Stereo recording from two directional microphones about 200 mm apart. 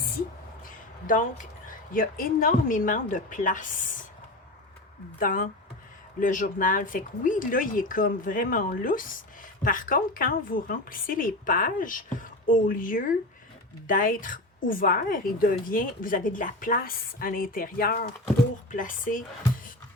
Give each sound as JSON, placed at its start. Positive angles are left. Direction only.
{"t": 0.6, "sound": "a woman's voice", "side_deg": 40}
{"t": 5.2, "sound": "speech", "side_deg": 45}